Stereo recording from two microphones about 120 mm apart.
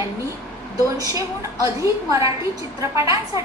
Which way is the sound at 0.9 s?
25° right (ahead or behind).